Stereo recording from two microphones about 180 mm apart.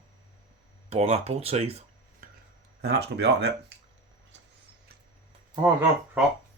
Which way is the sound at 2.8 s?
65° right (ahead or behind).